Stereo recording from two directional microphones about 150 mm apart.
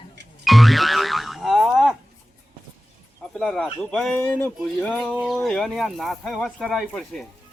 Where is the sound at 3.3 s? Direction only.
Centre (ahead or behind).